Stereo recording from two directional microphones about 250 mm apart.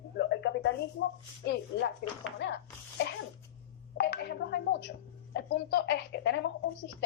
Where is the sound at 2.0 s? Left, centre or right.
Left.